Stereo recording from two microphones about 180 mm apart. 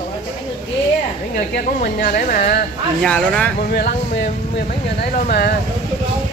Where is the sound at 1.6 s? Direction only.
55° left (ahead or behind).